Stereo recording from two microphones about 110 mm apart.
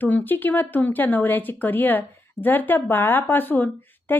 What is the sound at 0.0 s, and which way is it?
Speech, 15° left (ahead or behind).